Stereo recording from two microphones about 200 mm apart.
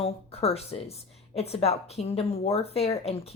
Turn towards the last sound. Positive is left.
turn(degrees=30)  # may be behind; listen again after turning